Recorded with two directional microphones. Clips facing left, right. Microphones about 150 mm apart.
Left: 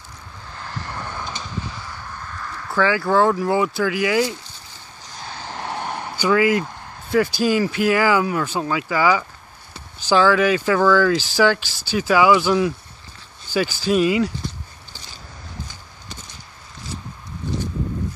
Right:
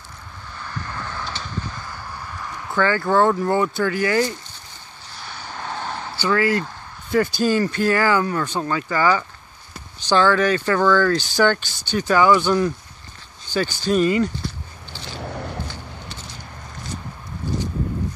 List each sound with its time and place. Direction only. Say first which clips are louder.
0.8 s vehicle: left 1 dB; 25° left (ahead or behind)
2.3 s a sound: even; 10° right (ahead or behind)
2.7 s speech: left 1 dB; 5° left (ahead or behind)
5.5 s vehicle: left 1 dB; 25° left (ahead or behind)
7.1 s speech: left 1 dB; centre (ahead or behind)
15.1 s a sound: right 10 dB; 65° right (ahead or behind)